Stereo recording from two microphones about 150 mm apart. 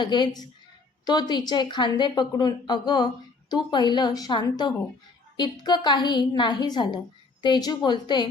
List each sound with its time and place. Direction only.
0.0 s a woman's voice: 30° left (ahead or behind)